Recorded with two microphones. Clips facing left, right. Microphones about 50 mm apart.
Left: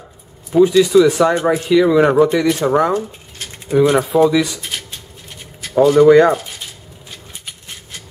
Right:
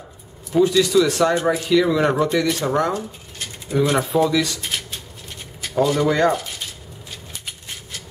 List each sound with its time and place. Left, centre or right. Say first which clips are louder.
0.5 s speech: left 5 dB; centre
5.8 s speech: left 9 dB; centre